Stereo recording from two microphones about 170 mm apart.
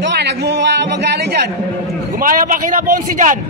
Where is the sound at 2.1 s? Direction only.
55° right (ahead or behind).